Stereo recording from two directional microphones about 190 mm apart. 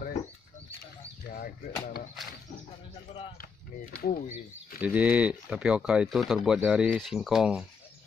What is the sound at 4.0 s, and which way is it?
Speech, 45° left (ahead or behind).